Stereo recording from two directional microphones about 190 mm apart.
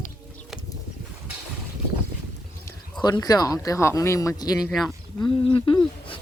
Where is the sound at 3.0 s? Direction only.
20° left (ahead or behind).